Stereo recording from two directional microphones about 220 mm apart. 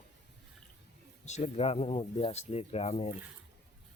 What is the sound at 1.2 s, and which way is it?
Speech, 30° left (ahead or behind).